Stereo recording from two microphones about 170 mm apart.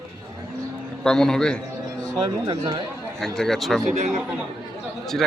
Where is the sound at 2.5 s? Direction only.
25° right (ahead or behind).